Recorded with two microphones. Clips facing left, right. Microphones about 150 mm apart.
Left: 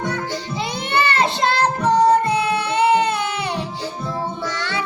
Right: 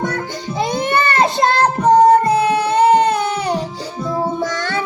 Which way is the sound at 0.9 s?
45° right (ahead or behind).